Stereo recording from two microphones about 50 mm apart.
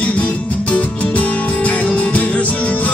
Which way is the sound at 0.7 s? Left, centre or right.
Left.